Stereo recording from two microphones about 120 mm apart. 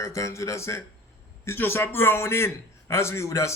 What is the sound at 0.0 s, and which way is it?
A man's voice, 25° left (ahead or behind).